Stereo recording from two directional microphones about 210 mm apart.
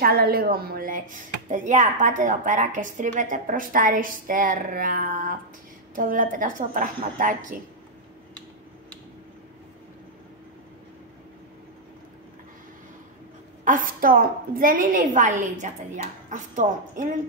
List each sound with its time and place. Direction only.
0.0 s a woman's voice: 45° right (ahead or behind)
13.7 s a woman's voice: 40° right (ahead or behind)